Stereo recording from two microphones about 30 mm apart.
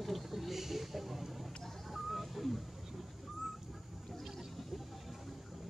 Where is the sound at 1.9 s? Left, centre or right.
Centre.